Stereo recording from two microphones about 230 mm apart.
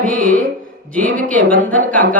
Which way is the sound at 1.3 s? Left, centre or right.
Centre.